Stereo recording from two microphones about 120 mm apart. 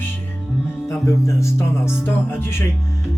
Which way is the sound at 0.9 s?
25° left (ahead or behind).